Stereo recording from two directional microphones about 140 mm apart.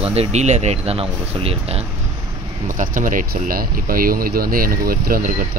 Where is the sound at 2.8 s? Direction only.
70° right (ahead or behind).